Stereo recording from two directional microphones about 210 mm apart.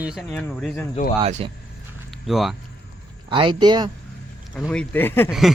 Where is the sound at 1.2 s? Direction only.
25° right (ahead or behind).